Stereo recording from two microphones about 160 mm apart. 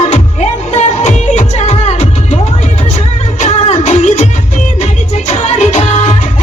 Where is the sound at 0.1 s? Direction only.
45° left (ahead or behind).